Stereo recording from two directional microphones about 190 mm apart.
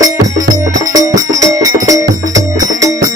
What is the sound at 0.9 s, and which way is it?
Music, 20° right (ahead or behind).